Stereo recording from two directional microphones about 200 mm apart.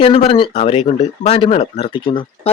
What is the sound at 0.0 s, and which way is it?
Speech, 30° left (ahead or behind).